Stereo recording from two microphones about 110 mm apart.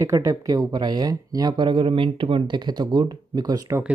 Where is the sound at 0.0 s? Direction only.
30° right (ahead or behind).